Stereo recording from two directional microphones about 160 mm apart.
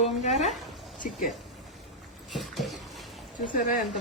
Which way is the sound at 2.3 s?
Centre (ahead or behind).